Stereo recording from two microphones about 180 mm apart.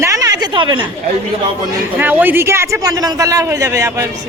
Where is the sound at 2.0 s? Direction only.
10° right (ahead or behind).